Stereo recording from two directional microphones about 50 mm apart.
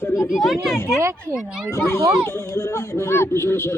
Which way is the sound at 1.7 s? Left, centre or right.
Left.